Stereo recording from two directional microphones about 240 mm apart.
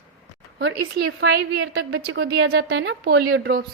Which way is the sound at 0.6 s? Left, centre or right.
Right.